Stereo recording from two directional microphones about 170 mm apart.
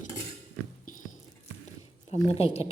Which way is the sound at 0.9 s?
50° left (ahead or behind).